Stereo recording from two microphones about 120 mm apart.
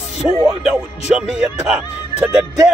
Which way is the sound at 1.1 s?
5° right (ahead or behind).